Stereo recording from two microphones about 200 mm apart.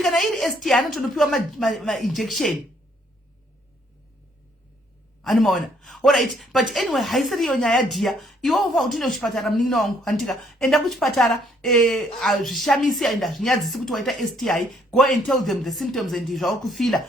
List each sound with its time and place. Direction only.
0.0 s speech: centre (ahead or behind)
5.2 s speech: centre (ahead or behind)